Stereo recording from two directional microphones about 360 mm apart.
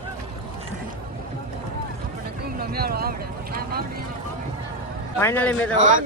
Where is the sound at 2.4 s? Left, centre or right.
Right.